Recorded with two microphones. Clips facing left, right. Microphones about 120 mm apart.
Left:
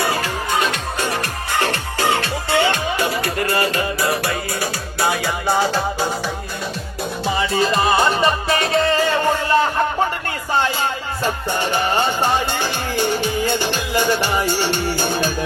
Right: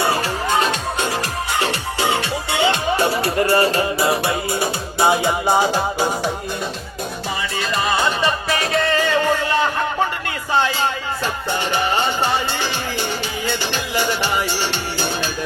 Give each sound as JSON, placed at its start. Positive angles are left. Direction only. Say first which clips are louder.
{"t": 0.0, "sound": "music", "louder": "right 1 dB", "side_deg": -30}
{"t": 1.5, "sound": "music", "louder": "left 2 dB", "side_deg": -15}
{"t": 2.9, "sound": "music", "louder": "right 3 dB", "side_deg": -30}
{"t": 7.5, "sound": "music", "louder": "left 4 dB", "side_deg": 35}
{"t": 12.2, "sound": "music", "louder": "left 2 dB", "side_deg": 45}
{"t": 13.9, "sound": "music", "louder": "left 3 dB", "side_deg": -15}
{"t": 14.3, "sound": "music", "louder": "left 3 dB", "side_deg": 45}